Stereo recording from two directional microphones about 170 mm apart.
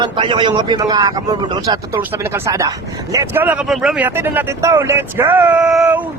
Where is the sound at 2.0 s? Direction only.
15° right (ahead or behind).